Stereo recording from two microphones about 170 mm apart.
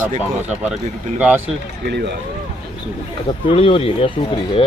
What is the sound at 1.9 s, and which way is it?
Speech, 75° right (ahead or behind).